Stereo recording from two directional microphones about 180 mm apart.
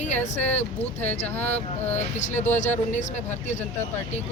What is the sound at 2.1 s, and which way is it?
Speech, 40° left (ahead or behind).